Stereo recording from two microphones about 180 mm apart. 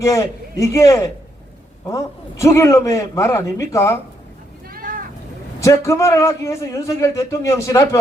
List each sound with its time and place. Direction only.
0.0 s a man's voice: 15° left (ahead or behind)
4.7 s vehicle: 50° right (ahead or behind)
5.5 s a man's voice: 15° left (ahead or behind)